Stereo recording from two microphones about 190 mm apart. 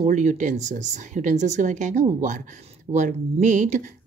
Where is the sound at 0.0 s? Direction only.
40° right (ahead or behind).